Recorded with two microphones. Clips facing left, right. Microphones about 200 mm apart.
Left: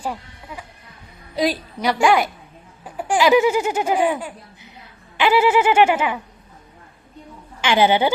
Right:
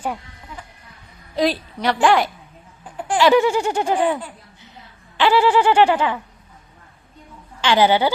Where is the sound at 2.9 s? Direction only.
5° left (ahead or behind).